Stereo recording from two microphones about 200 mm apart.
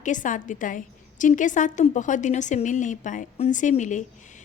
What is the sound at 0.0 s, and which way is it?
A woman's voice, 40° left (ahead or behind).